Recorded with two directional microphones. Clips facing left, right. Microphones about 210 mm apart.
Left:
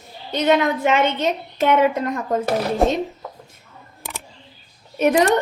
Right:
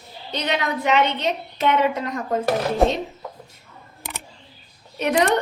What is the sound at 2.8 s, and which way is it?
Speech, centre (ahead or behind).